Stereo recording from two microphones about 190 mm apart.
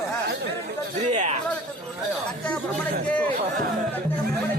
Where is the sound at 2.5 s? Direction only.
5° left (ahead or behind).